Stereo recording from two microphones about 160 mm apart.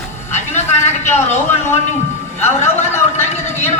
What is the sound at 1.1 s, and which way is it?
Speech, 45° left (ahead or behind).